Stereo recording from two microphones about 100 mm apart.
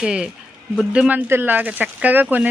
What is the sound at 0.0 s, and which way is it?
Speech, 5° right (ahead or behind).